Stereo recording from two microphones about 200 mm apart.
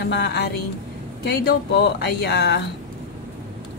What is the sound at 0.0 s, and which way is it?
Speech, 55° left (ahead or behind).